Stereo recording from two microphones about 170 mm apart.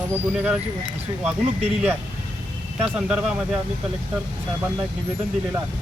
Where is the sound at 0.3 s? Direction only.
5° right (ahead or behind).